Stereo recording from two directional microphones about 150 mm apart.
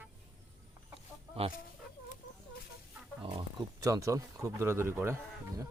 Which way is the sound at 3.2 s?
35° right (ahead or behind).